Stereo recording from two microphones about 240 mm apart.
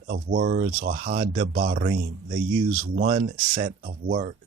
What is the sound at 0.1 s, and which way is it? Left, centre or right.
Speech, right.